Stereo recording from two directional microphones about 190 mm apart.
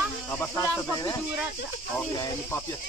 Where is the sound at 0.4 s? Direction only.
15° left (ahead or behind).